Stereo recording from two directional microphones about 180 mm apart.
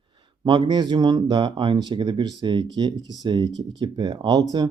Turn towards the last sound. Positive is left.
turn(degrees=-20)  # may be behind; listen again after turning